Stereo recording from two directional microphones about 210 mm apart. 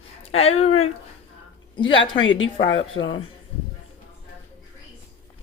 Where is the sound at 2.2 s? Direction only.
65° left (ahead or behind).